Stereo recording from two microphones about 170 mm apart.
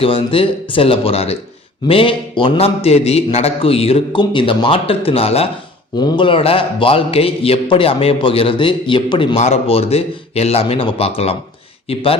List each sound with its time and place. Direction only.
0.0 s a man's voice: 35° left (ahead or behind)